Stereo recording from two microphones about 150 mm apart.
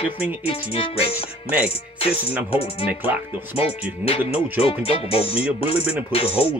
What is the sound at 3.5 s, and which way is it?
Speech, 40° left (ahead or behind).